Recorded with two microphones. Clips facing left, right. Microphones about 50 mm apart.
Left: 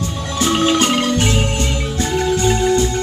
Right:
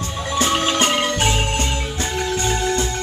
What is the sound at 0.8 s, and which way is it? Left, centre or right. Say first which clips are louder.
Marimba: left 2 dB; centre.